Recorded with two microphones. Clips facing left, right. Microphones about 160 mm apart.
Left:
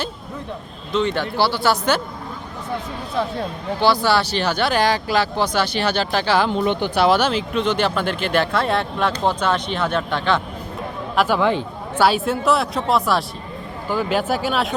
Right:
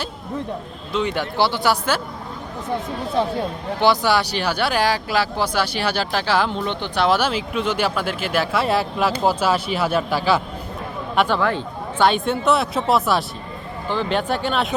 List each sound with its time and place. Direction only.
0.9 s speech: 10° right (ahead or behind)
3.8 s speech: 15° right (ahead or behind)
6.7 s speech: 10° left (ahead or behind)
7.2 s speech: 5° right (ahead or behind)
11.3 s speech: 15° left (ahead or behind)
11.9 s speech: 5° left (ahead or behind)
13.8 s speech: 10° left (ahead or behind)